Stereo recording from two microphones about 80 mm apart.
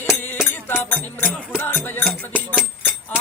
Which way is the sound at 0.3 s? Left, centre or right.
Left.